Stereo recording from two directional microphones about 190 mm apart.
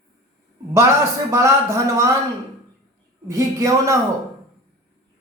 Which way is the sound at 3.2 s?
15° right (ahead or behind).